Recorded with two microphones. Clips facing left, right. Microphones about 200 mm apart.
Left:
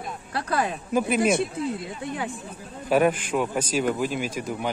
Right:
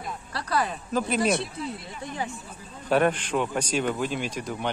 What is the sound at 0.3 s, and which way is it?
Speech, 55° left (ahead or behind).